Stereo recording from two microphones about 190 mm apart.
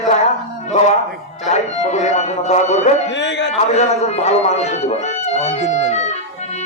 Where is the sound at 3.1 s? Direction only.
70° left (ahead or behind).